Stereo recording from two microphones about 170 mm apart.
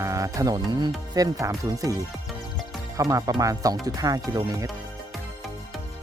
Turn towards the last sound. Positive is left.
turn(degrees=-20)  # may be behind; listen again after turning